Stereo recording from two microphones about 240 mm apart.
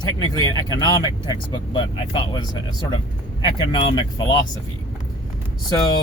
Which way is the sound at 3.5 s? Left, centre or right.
Centre.